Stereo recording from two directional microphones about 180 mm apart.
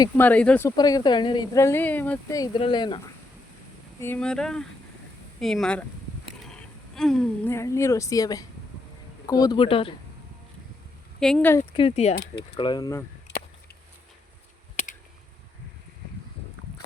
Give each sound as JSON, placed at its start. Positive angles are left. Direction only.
{"t": 0.2, "sound": "speech", "side_deg": 10}
{"t": 0.8, "sound": "speech", "side_deg": 20}
{"t": 4.0, "sound": "speech", "side_deg": 5}
{"t": 11.2, "sound": "speech", "side_deg": 5}
{"t": 11.7, "sound": "speech", "side_deg": 30}
{"t": 12.1, "sound": "speech", "side_deg": 60}
{"t": 12.5, "sound": "speech", "side_deg": 25}